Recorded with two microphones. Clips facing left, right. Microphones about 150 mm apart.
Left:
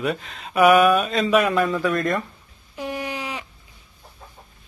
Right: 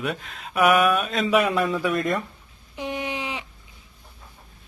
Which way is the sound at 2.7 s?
20° right (ahead or behind).